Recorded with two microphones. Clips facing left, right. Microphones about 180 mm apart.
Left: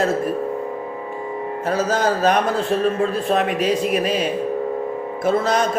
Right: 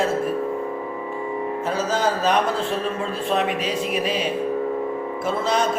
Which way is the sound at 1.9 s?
45° left (ahead or behind).